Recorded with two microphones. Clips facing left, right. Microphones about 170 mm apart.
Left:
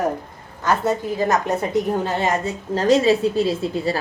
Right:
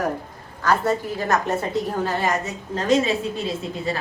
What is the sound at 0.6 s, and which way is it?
A woman's voice, 20° left (ahead or behind).